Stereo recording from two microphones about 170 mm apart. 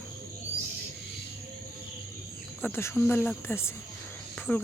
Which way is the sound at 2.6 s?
15° left (ahead or behind).